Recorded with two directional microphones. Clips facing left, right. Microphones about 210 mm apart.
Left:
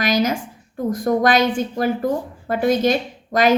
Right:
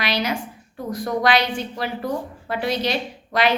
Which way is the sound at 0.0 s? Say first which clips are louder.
Left 5 dB; 45° left (ahead or behind).